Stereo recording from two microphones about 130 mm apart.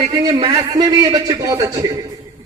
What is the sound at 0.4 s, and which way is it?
A man's voice, 30° right (ahead or behind).